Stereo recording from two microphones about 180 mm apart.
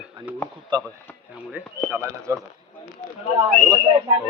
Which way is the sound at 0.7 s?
25° right (ahead or behind).